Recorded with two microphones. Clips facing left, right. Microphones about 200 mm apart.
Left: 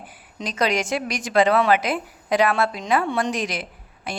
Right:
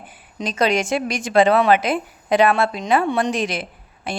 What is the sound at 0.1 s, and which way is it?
A woman's voice, 25° right (ahead or behind).